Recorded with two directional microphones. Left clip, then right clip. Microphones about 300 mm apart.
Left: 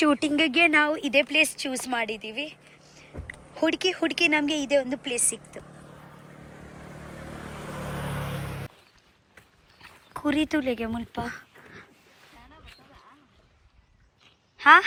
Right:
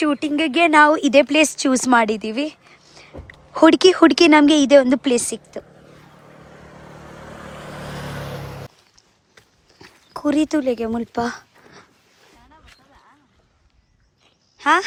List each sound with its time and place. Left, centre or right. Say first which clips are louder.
0.0 s speech: right 3 dB; centre
1.2 s speech: right 7 dB; right
3.5 s speech: right 13 dB; right
5.1 s speech: right 10 dB; centre
6.2 s vehicle: right 4 dB; right
9.7 s a sound: right 5 dB; centre
14.6 s speech: left 1 dB; centre